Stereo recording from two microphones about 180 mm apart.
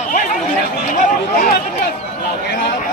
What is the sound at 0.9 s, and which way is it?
Chatter, 45° left (ahead or behind).